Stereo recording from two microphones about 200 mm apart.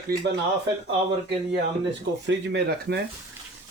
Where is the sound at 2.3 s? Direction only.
60° right (ahead or behind).